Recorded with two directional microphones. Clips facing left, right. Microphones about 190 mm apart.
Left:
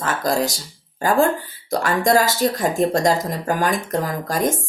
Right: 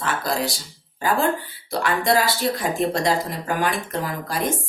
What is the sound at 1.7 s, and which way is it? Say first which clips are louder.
Speech: left 3 dB; 45° left (ahead or behind).